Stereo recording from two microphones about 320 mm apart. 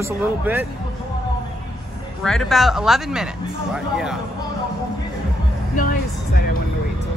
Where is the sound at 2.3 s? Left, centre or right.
Centre.